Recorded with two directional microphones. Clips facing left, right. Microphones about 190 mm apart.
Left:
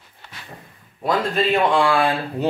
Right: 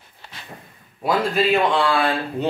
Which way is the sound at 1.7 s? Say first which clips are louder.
Left 2 dB; 10° left (ahead or behind).